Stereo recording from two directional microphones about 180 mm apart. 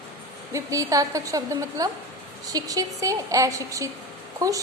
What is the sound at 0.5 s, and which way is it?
A woman's voice, 20° right (ahead or behind).